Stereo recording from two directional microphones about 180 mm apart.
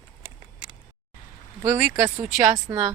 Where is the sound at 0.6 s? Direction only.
25° right (ahead or behind).